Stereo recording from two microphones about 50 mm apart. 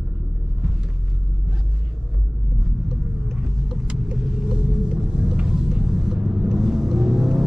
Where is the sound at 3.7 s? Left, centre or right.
Centre.